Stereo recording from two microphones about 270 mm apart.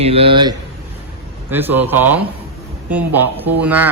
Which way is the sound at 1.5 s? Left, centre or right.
Centre.